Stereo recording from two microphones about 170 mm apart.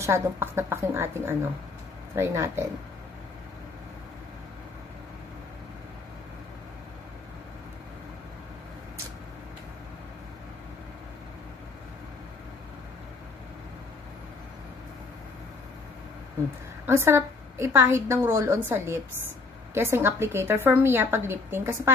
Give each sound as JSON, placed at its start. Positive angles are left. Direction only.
{"t": 0.0, "sound": "a woman's voice", "side_deg": -15}
{"t": 16.8, "sound": "a woman's voice", "side_deg": -15}